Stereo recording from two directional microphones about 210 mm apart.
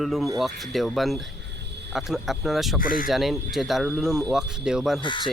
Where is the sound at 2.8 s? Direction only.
40° left (ahead or behind).